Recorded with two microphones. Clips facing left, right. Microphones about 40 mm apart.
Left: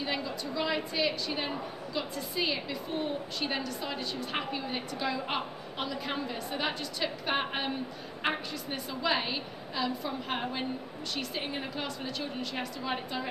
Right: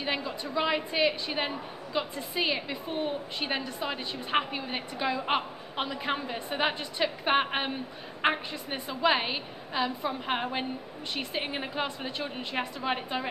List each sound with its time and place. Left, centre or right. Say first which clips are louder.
0.0 s a woman's voice: right 2 dB; right